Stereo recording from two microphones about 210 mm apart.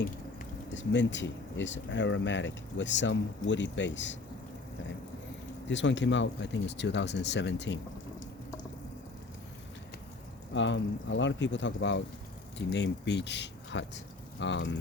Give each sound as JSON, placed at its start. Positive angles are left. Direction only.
{"t": 0.7, "sound": "speech", "side_deg": 60}
{"t": 5.6, "sound": "speech", "side_deg": 60}
{"t": 10.5, "sound": "speech", "side_deg": 60}